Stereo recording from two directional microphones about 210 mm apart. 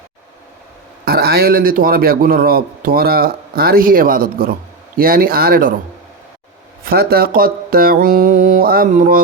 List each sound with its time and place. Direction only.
1.0 s a man's voice: 45° right (ahead or behind)
6.8 s a man's voice: 45° right (ahead or behind)